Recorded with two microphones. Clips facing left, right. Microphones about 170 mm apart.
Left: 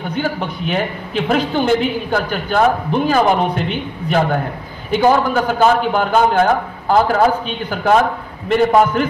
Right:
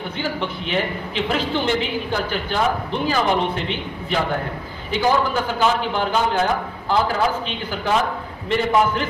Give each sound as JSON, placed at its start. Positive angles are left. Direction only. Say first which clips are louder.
{"t": 0.1, "sound": "a man's voice", "louder": "left 6 dB", "side_deg": 50}